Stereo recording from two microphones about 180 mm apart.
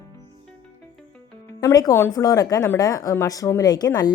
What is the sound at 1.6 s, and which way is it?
A woman's voice, 20° left (ahead or behind).